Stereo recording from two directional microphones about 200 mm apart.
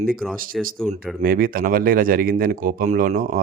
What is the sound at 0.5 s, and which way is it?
Speech, centre (ahead or behind).